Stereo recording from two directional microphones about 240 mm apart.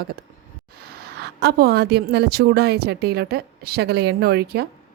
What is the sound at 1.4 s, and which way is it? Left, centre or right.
A woman's voice, right.